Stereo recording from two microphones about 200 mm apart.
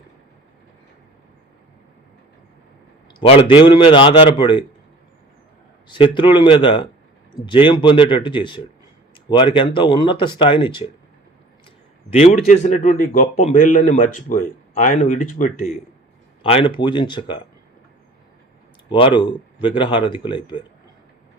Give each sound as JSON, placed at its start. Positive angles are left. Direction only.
{"t": 3.1, "sound": "speech", "side_deg": 25}
{"t": 5.9, "sound": "speech", "side_deg": 25}
{"t": 12.1, "sound": "a man's voice", "side_deg": 35}
{"t": 16.4, "sound": "speech", "side_deg": 25}
{"t": 18.9, "sound": "speech", "side_deg": 25}